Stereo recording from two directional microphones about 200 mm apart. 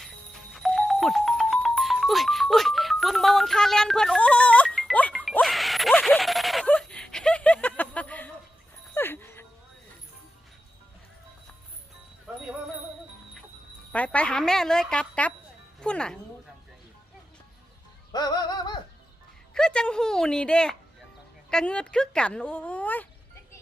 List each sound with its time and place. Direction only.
0.5 s music: centre (ahead or behind)
9.0 s dog: 10° left (ahead or behind)
13.9 s music: 5° left (ahead or behind)
15.8 s speech: 5° left (ahead or behind)
18.1 s a sound: 20° left (ahead or behind)
19.5 s a sound: 5° left (ahead or behind)
21.5 s speech: 5° left (ahead or behind)